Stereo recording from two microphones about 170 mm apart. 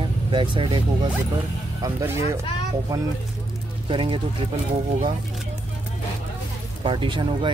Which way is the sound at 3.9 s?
30° right (ahead or behind).